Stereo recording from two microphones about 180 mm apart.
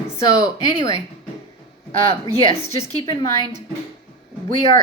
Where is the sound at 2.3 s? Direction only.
35° left (ahead or behind).